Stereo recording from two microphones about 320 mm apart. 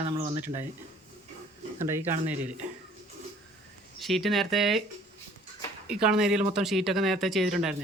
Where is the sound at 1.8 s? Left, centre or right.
Centre.